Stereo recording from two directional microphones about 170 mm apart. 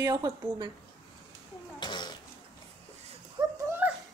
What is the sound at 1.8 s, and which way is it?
Cough, 25° left (ahead or behind).